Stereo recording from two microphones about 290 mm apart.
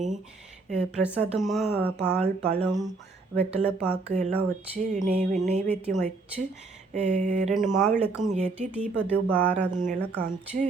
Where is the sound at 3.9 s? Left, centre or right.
Right.